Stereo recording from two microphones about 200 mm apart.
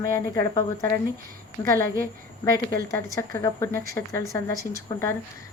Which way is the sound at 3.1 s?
15° left (ahead or behind).